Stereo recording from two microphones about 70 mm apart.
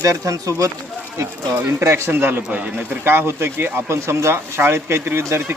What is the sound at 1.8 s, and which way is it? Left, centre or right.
Speech, right.